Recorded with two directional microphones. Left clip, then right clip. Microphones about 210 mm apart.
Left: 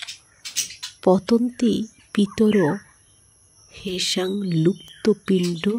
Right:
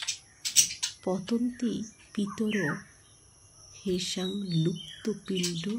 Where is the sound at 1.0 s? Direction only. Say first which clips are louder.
Left 15 dB; 45° left (ahead or behind).